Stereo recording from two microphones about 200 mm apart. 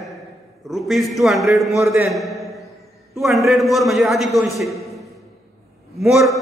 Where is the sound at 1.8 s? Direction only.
Centre (ahead or behind).